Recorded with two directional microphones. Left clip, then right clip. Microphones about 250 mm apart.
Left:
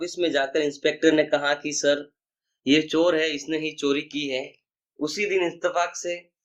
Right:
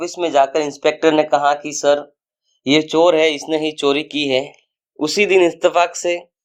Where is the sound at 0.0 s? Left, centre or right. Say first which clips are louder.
Right 9 dB; right.